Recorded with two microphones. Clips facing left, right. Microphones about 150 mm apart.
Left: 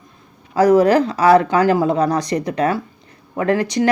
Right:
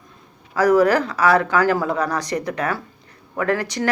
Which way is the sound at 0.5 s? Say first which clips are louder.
Left 3 dB; 25° left (ahead or behind).